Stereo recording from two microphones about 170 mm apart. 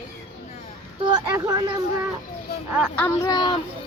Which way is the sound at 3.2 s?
25° left (ahead or behind).